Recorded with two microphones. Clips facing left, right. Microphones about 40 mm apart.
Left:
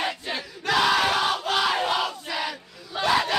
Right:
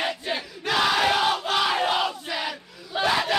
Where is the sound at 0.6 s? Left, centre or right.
Centre.